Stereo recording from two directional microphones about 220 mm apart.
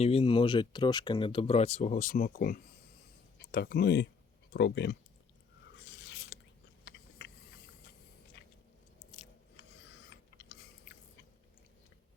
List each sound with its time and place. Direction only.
0.0 s speech: 25° left (ahead or behind); by 4.9 s 50° left (ahead or behind)
5.8 s biting: 55° left (ahead or behind)
7.2 s hiss: 50° left (ahead or behind)
10.1 s chewing: 55° left (ahead or behind)